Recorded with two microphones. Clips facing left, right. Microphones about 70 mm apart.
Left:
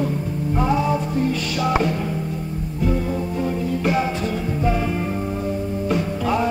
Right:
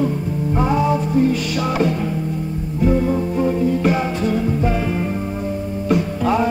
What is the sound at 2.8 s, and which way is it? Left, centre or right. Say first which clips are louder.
Music: right 6 dB; centre.